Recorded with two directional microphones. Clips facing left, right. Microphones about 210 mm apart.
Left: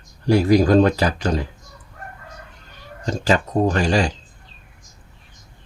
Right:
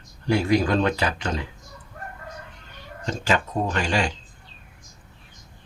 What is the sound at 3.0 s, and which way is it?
Speech, 40° left (ahead or behind).